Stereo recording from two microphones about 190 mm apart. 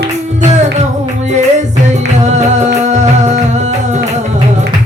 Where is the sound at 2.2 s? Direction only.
35° right (ahead or behind).